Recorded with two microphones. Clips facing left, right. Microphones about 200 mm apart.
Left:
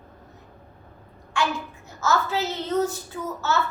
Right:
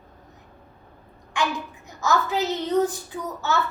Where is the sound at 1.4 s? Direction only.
15° right (ahead or behind).